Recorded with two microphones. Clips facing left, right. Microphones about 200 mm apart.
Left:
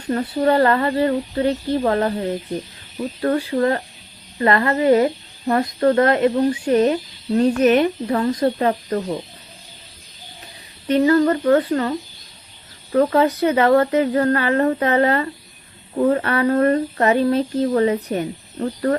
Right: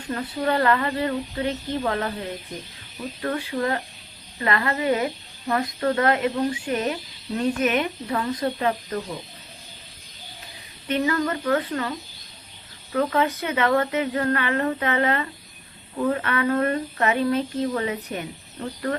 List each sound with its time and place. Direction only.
0.1 s speech: 35° left (ahead or behind)
3.2 s speech: 40° left (ahead or behind)
10.8 s speech: 35° left (ahead or behind)